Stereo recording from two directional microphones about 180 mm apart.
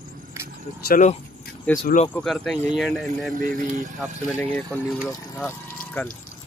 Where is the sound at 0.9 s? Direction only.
40° left (ahead or behind).